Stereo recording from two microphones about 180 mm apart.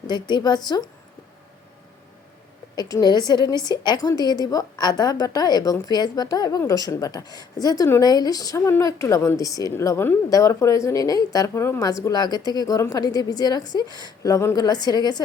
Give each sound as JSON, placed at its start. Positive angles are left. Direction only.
{"t": 0.1, "sound": "a woman's voice", "side_deg": 25}
{"t": 2.7, "sound": "a woman's voice", "side_deg": 20}